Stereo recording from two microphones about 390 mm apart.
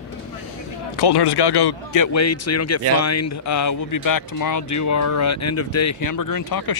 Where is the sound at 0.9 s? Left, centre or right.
Left.